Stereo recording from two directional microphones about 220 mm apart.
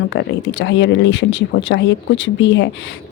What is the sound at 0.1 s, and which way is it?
Speech, 55° left (ahead or behind).